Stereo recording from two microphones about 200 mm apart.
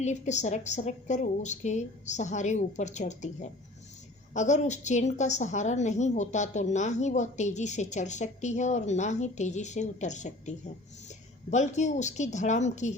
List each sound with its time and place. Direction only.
0.0 s a woman's voice: 35° left (ahead or behind)
11.5 s a woman's voice: 35° left (ahead or behind)